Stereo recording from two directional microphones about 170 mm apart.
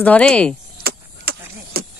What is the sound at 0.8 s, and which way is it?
Vehicle, 65° right (ahead or behind).